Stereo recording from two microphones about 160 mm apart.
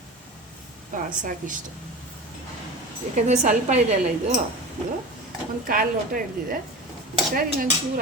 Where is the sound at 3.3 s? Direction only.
45° right (ahead or behind).